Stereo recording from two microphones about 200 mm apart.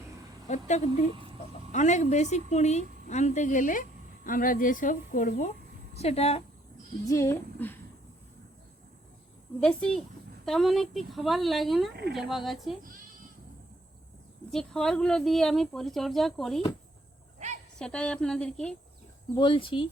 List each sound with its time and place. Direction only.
0.4 s a woman's voice: 35° left (ahead or behind)
6.0 s a woman's voice: 30° left (ahead or behind)
7.1 s speech: 15° left (ahead or behind)
9.6 s speech: 5° left (ahead or behind)
14.5 s speech: 5° left (ahead or behind)
17.7 s speech: 5° left (ahead or behind)
19.3 s speech: 25° left (ahead or behind)